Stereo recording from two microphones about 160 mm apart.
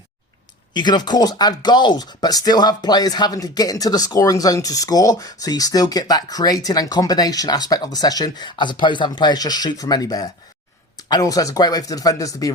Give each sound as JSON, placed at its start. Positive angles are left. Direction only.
{"t": 0.7, "sound": "speech", "side_deg": 25}